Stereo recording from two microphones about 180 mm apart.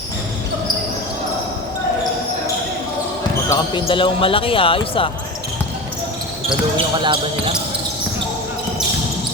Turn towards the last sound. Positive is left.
turn(degrees=-25)  # may be behind; listen again after turning